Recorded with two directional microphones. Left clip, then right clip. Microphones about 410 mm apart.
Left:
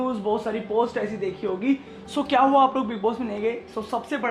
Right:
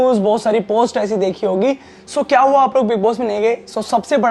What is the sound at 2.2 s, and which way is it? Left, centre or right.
A woman's voice, right.